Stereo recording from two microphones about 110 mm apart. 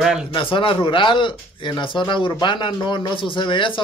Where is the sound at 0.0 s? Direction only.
5° right (ahead or behind).